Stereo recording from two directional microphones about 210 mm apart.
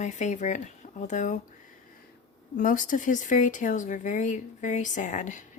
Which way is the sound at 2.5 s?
40° left (ahead or behind).